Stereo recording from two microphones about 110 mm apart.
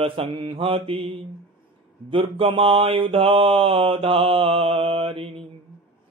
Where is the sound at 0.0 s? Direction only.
55° right (ahead or behind).